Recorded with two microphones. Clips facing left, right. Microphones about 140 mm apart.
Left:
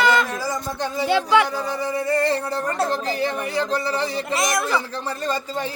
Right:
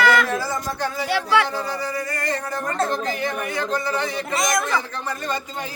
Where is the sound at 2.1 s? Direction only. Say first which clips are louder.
Left 6 dB; 30° left (ahead or behind).